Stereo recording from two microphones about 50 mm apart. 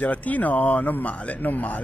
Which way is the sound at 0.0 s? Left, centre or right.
Left.